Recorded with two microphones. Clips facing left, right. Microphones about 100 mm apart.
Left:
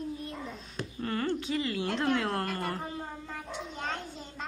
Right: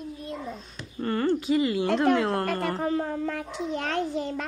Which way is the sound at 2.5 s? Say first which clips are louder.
Right 8 dB; 90° right.